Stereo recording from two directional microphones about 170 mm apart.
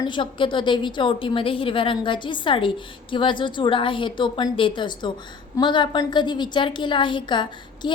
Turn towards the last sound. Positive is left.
turn(degrees=25)  # may be behind; listen again after turning